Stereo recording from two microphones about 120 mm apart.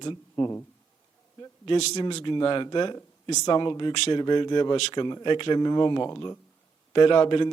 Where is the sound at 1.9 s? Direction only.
40° left (ahead or behind).